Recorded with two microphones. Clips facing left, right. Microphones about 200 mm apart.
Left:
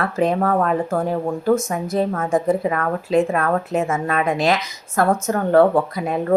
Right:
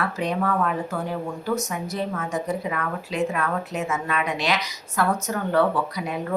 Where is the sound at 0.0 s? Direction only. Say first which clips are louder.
Left 6 dB; 50° left (ahead or behind).